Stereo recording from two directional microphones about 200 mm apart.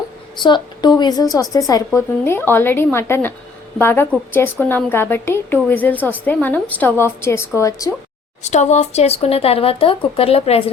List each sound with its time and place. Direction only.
0.4 s a woman's voice: 20° left (ahead or behind)
8.4 s speech: 35° left (ahead or behind)